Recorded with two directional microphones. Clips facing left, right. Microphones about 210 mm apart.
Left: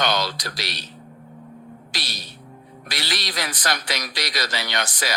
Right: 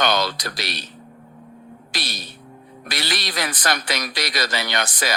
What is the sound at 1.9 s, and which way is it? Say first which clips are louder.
A man's voice: right 4 dB; 55° right (ahead or behind).